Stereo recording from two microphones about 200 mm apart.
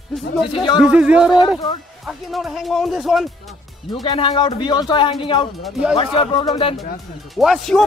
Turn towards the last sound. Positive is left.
turn(degrees=0)  # may be behind; listen again after turning